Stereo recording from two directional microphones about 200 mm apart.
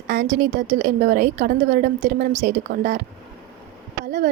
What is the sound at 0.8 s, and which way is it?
A woman's voice, 45° right (ahead or behind).